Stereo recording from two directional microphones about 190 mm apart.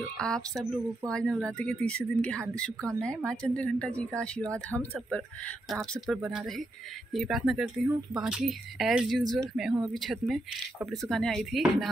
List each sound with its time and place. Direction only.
0.2 s a woman's voice: 5° left (ahead or behind)